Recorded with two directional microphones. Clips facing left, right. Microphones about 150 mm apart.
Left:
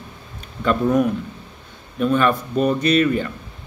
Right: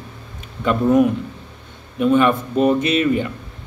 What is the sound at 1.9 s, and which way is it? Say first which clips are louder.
Speech: right 3 dB; 15° right (ahead or behind).